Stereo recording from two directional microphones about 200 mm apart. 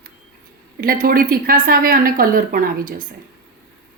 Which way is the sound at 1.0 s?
45° right (ahead or behind).